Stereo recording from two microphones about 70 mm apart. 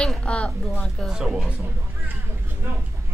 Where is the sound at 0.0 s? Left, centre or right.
Centre.